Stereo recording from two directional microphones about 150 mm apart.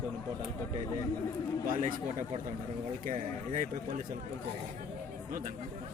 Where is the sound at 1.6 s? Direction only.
60° right (ahead or behind).